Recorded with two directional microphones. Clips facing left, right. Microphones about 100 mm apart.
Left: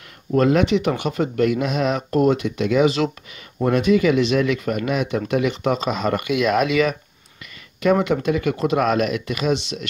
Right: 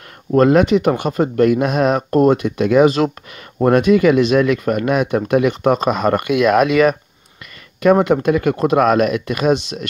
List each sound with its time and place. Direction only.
0.3 s speech: 45° right (ahead or behind)